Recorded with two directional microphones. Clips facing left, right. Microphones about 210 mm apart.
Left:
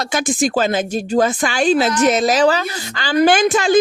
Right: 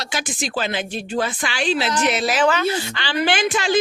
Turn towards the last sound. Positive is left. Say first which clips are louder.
# left 6 dB
turn(degrees=45)  # may be behind; listen again after turning